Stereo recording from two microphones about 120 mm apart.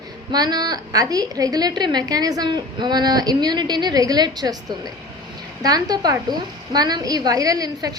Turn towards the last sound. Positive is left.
turn(degrees=-30)  # may be behind; listen again after turning